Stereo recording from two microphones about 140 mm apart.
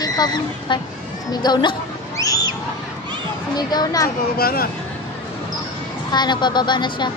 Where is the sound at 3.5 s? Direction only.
30° left (ahead or behind).